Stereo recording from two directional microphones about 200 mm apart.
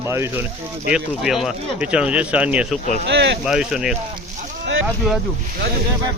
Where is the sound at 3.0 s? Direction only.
60° right (ahead or behind).